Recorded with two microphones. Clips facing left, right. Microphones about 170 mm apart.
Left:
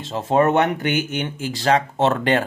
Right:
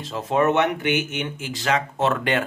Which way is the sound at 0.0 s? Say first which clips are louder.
Left 3 dB; 30° left (ahead or behind).